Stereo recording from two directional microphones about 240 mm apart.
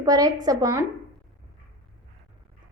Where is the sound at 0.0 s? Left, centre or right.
Centre.